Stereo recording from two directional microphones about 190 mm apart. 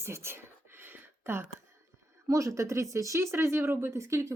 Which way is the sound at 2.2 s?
15° right (ahead or behind).